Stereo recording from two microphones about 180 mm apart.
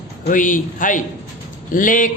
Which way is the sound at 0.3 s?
45° left (ahead or behind).